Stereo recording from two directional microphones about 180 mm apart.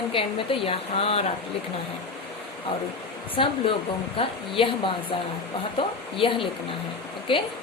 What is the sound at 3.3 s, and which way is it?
Speech, 30° left (ahead or behind).